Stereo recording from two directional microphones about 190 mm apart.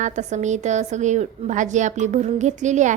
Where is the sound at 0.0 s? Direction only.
40° right (ahead or behind).